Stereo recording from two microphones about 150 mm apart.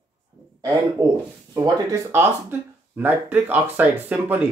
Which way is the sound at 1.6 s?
20° right (ahead or behind).